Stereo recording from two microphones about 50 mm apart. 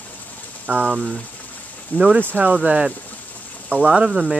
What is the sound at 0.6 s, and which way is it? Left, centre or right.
Speech, right.